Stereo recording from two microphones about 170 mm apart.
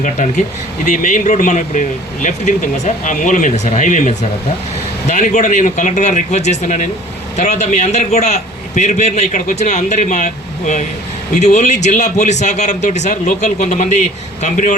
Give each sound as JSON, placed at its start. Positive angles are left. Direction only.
{"t": 0.0, "sound": "a man's voice", "side_deg": 45}